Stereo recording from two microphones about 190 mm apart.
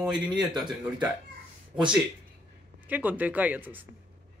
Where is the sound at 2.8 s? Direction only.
10° right (ahead or behind).